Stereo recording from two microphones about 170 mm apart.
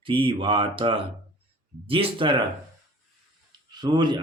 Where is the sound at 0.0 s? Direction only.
30° right (ahead or behind).